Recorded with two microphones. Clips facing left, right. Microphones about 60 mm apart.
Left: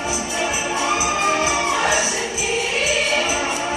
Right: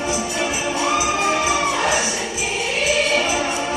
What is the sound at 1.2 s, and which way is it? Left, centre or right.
Music, centre.